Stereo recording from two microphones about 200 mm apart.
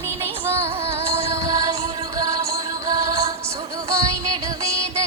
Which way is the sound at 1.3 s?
15° right (ahead or behind).